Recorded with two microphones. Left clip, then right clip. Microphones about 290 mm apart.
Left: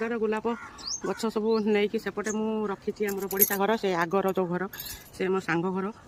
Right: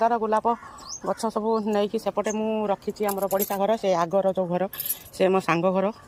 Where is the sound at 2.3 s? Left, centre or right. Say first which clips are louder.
Right 5 dB; centre.